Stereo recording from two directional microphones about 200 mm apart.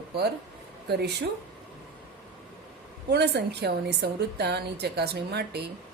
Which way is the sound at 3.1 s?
55° right (ahead or behind).